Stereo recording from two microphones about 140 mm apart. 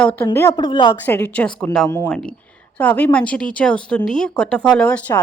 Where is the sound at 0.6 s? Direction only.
30° left (ahead or behind).